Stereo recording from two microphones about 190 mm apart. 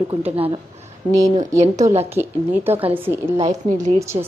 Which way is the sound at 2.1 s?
10° right (ahead or behind).